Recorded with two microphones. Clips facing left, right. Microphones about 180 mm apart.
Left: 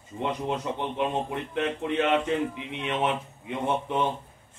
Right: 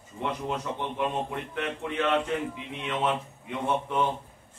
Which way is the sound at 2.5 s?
25° left (ahead or behind).